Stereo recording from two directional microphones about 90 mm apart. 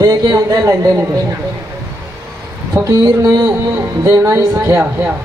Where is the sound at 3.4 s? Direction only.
25° right (ahead or behind).